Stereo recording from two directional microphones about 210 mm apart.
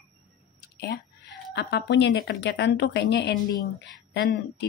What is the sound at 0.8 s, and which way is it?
Whispering, 50° left (ahead or behind).